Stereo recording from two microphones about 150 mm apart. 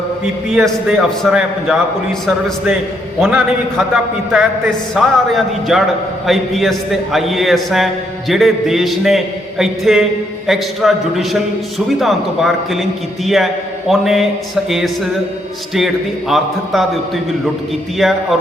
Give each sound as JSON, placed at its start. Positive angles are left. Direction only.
{"t": 0.5, "sound": "a man's voice", "side_deg": 0}
{"t": 3.2, "sound": "a man's voice", "side_deg": 0}
{"t": 16.3, "sound": "a man's voice", "side_deg": 0}
{"t": 17.9, "sound": "a man's voice", "side_deg": 0}